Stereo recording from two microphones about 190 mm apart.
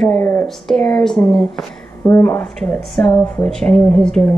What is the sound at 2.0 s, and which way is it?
A woman's voice, 15° left (ahead or behind).